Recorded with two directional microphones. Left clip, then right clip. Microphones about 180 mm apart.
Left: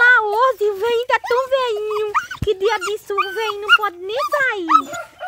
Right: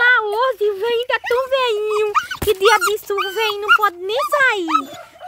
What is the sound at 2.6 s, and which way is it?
Speech, 25° right (ahead or behind).